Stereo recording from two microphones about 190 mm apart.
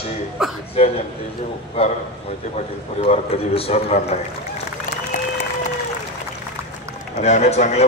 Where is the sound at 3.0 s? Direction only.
30° left (ahead or behind).